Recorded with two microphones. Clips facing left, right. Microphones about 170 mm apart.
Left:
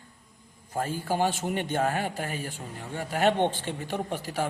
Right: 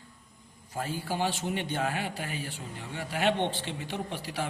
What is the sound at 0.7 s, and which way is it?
A man's voice, 45° left (ahead or behind).